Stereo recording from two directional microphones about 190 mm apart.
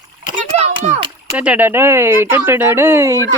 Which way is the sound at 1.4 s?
10° right (ahead or behind).